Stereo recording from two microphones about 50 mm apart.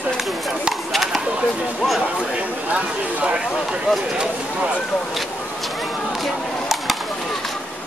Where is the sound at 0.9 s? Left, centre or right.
Centre.